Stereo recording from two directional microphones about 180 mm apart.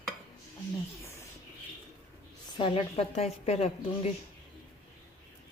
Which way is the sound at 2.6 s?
30° left (ahead or behind).